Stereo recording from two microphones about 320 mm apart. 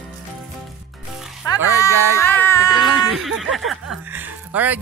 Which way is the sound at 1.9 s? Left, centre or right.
Centre.